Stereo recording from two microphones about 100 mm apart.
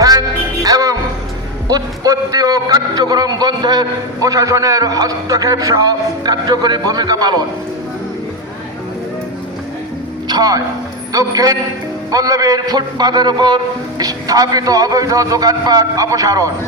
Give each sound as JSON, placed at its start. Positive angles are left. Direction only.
{"t": 0.0, "sound": "music", "side_deg": -40}
{"t": 1.7, "sound": "a man's voice", "side_deg": -40}
{"t": 10.2, "sound": "a man's voice", "side_deg": -40}